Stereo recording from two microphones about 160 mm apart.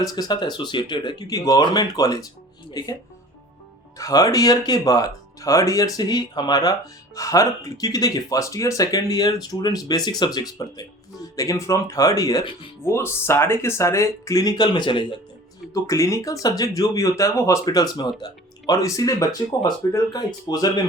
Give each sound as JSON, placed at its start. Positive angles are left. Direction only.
{"t": 0.0, "sound": "speech", "side_deg": 25}
{"t": 3.9, "sound": "speech", "side_deg": 20}
{"t": 15.7, "sound": "speech", "side_deg": 20}